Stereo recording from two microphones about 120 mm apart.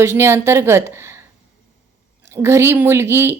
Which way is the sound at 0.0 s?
20° right (ahead or behind).